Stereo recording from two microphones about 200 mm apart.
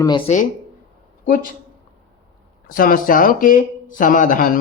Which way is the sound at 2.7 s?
45° left (ahead or behind).